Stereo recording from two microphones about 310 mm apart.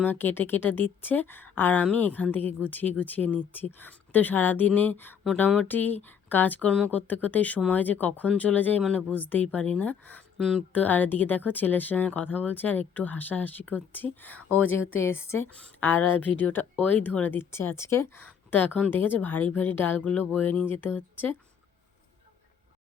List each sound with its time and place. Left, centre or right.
0.0 s a woman's voice: centre
14.8 s a woman's voice: left
15.1 s a woman's voice: centre